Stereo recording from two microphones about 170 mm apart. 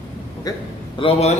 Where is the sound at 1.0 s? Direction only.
35° left (ahead or behind).